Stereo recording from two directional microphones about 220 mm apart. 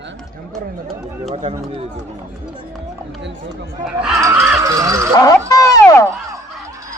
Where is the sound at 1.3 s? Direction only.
30° right (ahead or behind).